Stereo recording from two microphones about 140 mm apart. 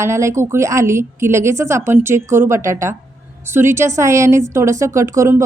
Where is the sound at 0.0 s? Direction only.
20° right (ahead or behind).